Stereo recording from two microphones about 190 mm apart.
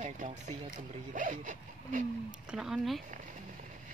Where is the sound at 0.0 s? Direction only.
40° right (ahead or behind).